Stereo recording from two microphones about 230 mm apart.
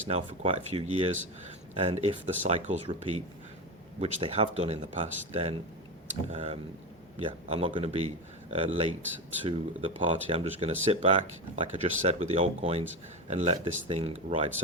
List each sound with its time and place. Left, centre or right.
0.1 s speech: right